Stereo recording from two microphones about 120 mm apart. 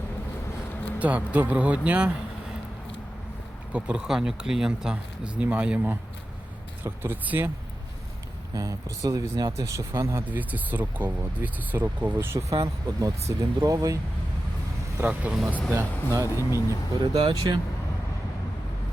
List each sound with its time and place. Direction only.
0.9 s speech: 10° right (ahead or behind)
3.7 s speech: 10° right (ahead or behind)
8.5 s speech: 30° right (ahead or behind)
10.2 s speech: 15° right (ahead or behind)
14.9 s speech: 10° right (ahead or behind)
16.2 s speech: 30° left (ahead or behind)
17.0 s speech: 40° right (ahead or behind)